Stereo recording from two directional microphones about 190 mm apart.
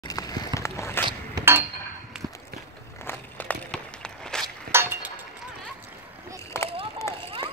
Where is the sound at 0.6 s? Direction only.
15° left (ahead or behind).